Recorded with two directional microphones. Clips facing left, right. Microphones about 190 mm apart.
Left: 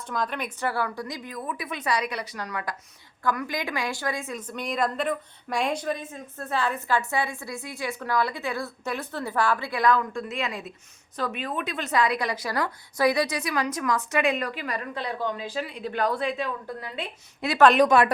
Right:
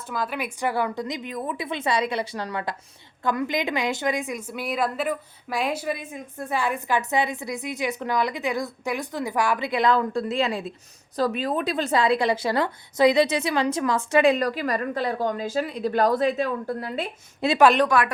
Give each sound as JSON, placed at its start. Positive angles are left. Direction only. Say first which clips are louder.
{"t": 0.1, "sound": "a woman's voice", "louder": "right 1 dB", "side_deg": -5}
{"t": 17.4, "sound": "a woman's voice", "louder": "right 5 dB", "side_deg": -30}
{"t": 17.8, "sound": "speech", "louder": "left 2 dB", "side_deg": 25}